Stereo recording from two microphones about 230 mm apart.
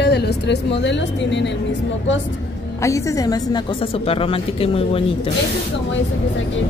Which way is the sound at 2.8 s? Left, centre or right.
Centre.